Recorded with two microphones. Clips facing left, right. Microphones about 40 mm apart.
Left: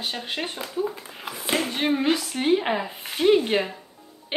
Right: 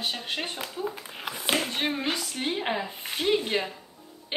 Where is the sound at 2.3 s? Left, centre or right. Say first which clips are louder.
Left 9 dB; left.